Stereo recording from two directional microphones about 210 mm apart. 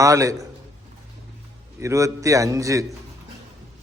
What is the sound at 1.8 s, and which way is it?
A man's voice, 15° right (ahead or behind).